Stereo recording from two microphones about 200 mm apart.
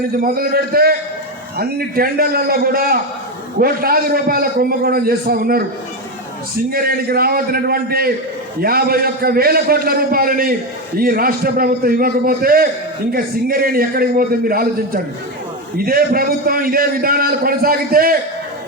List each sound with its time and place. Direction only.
0.2 s a man's voice: 45° right (ahead or behind)
6.7 s a man's voice: 50° right (ahead or behind)